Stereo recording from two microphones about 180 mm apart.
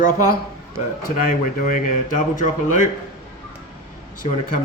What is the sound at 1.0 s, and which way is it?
Speech, 50° left (ahead or behind).